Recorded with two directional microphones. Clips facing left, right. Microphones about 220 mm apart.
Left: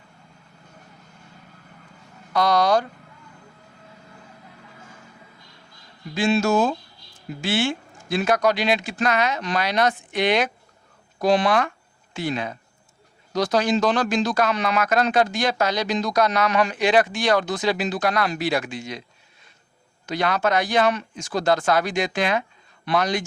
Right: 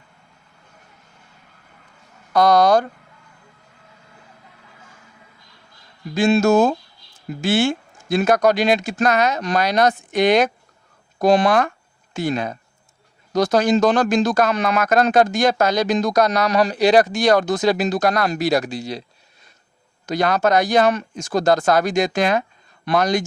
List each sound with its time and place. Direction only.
2.3 s speech: 45° right (ahead or behind)
6.1 s speech: 45° right (ahead or behind)
20.1 s speech: 40° right (ahead or behind)